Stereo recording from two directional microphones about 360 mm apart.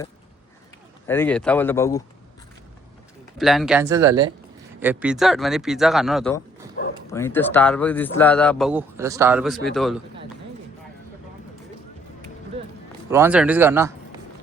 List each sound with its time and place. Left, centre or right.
1.0 s speech: centre
3.3 s speech: centre
6.8 s bow-wow: left
7.1 s speech: centre
13.1 s speech: centre